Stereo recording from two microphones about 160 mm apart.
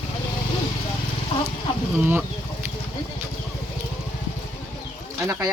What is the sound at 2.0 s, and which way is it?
Speech, 10° right (ahead or behind).